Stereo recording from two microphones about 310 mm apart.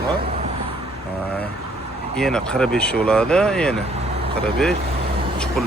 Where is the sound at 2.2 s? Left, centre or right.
Centre.